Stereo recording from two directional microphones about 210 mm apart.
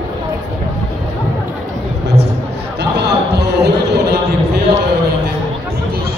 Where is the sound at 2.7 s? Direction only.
50° right (ahead or behind).